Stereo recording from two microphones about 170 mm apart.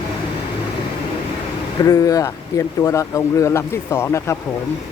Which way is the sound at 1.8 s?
20° left (ahead or behind).